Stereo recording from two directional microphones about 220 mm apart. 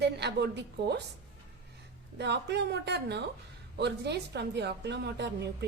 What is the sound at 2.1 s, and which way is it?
A woman's voice, 50° right (ahead or behind).